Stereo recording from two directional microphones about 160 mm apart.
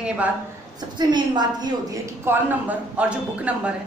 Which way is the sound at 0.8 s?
25° right (ahead or behind).